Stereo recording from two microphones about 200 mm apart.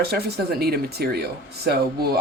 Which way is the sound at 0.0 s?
50° right (ahead or behind).